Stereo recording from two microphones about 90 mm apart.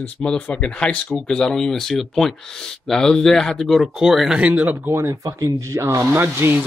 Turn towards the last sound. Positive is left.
turn(degrees=-25)  # may be behind; listen again after turning